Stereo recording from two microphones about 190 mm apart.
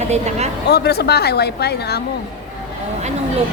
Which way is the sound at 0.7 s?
55° left (ahead or behind).